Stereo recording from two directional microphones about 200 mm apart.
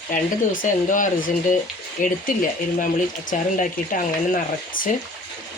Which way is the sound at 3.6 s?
40° left (ahead or behind).